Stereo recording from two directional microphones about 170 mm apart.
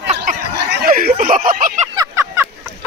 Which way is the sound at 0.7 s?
60° right (ahead or behind).